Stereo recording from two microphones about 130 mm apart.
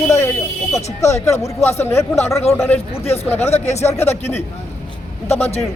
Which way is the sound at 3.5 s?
60° left (ahead or behind).